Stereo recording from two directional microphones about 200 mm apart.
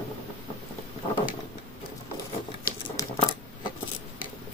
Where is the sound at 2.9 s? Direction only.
15° left (ahead or behind).